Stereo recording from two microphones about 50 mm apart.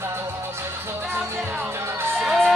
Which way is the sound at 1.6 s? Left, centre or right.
Right.